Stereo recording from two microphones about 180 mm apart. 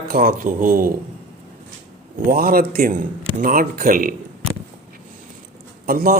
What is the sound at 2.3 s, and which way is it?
A man's voice, 55° right (ahead or behind).